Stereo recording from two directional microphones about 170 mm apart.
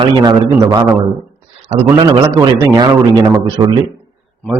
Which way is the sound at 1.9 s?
25° right (ahead or behind).